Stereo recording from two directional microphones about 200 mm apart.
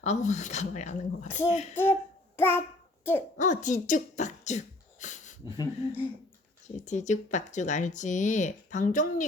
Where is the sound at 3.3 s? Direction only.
40° left (ahead or behind).